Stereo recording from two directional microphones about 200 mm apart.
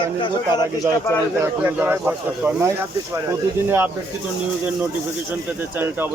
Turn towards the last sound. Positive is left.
turn(degrees=-10)  # may be behind; listen again after turning